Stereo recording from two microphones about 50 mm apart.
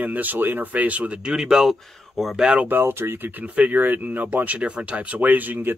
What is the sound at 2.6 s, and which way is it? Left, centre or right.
Speech, right.